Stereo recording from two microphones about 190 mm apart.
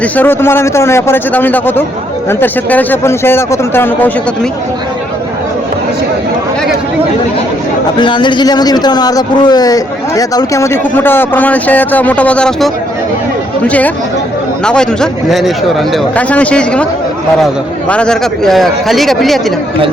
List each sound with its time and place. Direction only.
0.0 s a man's voice: 10° left (ahead or behind)
7.9 s a man's voice: 25° left (ahead or behind); by 19.5 s centre (ahead or behind)